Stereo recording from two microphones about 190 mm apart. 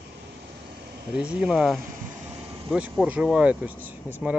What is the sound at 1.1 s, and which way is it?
Speech, 5° right (ahead or behind).